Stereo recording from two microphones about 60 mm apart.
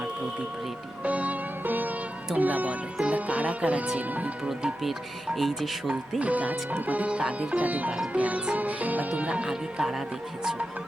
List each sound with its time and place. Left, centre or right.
1.0 s music: right
4.4 s speech: centre
5.9 s speech: right